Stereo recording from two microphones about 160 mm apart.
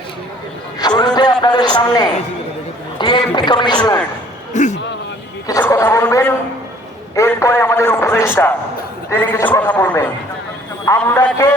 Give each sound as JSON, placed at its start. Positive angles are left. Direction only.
{"t": 0.8, "sound": "a sound", "side_deg": 25}
{"t": 3.0, "sound": "speech", "side_deg": 25}
{"t": 4.5, "sound": "a man's voice", "side_deg": 45}
{"t": 5.5, "sound": "a man's voice", "side_deg": 15}